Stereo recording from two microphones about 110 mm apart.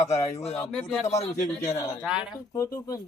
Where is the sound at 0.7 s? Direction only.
5° left (ahead or behind).